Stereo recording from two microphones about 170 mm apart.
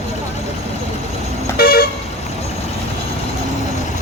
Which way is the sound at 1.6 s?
60° left (ahead or behind).